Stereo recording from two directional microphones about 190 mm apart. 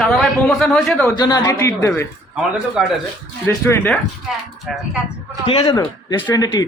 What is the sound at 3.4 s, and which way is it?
Speech, 10° left (ahead or behind).